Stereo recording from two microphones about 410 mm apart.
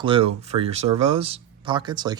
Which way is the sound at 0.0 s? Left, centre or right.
Centre.